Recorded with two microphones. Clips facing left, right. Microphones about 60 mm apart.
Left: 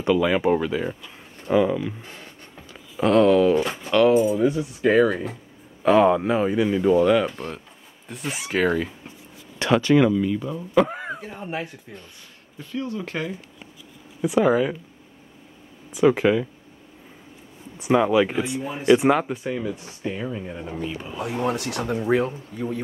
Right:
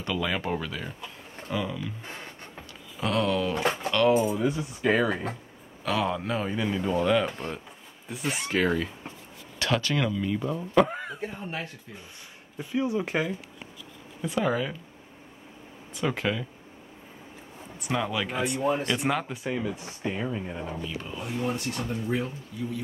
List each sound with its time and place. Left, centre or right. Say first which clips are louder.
0.0 s speech: left 10 dB; centre
3.0 s speech: left 10 dB; centre
5.9 s speech: left 11 dB; left; by 8.9 s centre
9.6 s speech: left 9 dB; left
10.2 s speech: left 3 dB; centre
12.5 s speech: right 2 dB; centre
14.2 s speech: left 8 dB; centre
15.9 s speech: left 10 dB; centre
17.7 s speech: left 11 dB; centre
19.3 s speech: left 3 dB; centre
19.7 s speech: left 2 dB; centre
21.2 s speech: left 6 dB; left
22.5 s a man's voice: left 2 dB; left